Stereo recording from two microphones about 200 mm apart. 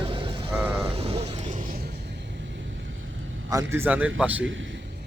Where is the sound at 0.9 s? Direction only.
30° right (ahead or behind).